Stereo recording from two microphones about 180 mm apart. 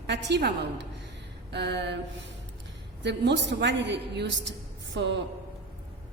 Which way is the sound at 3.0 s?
75° right (ahead or behind).